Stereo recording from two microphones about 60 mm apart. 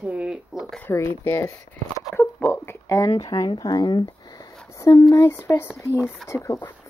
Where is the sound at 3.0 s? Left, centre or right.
Left.